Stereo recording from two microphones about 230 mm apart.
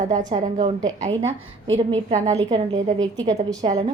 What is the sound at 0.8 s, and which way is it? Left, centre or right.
A woman's voice, centre.